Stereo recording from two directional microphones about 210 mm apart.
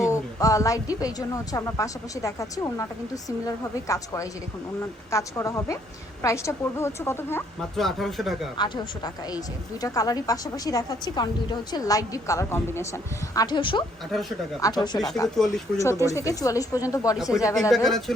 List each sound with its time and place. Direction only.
0.0 s a woman's voice: 15° left (ahead or behind)
8.5 s a woman's voice: 20° left (ahead or behind)
14.1 s speech: centre (ahead or behind)
14.6 s speech: 20° left (ahead or behind)
14.9 s speech: centre (ahead or behind)
15.8 s a woman's voice: 15° left (ahead or behind)
17.7 s speech: centre (ahead or behind)